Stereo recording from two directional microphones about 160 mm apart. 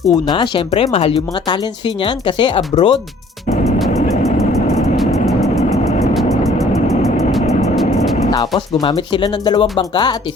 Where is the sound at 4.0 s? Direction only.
45° left (ahead or behind).